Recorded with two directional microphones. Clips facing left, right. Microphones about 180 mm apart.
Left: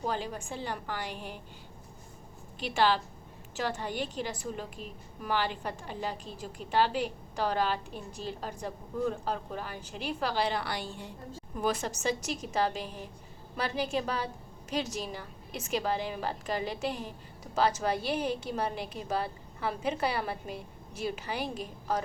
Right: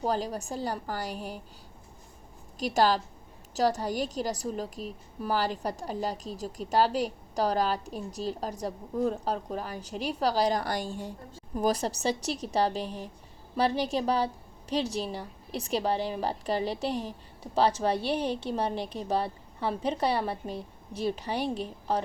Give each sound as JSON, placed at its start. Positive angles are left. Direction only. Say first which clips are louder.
{"t": 0.0, "sound": "a woman's voice", "louder": "right 4 dB", "side_deg": -40}
{"t": 2.6, "sound": "a woman's voice", "louder": "right 3 dB", "side_deg": -40}